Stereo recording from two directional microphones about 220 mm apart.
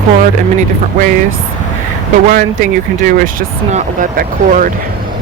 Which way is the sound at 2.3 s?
40° right (ahead or behind).